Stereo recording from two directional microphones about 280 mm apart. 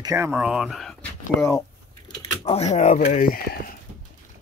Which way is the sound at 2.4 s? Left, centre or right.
Left.